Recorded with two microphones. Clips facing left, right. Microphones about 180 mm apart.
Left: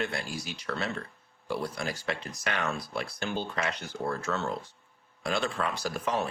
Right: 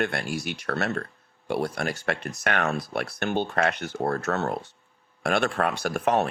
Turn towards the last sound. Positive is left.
turn(degrees=-70)  # may be behind; listen again after turning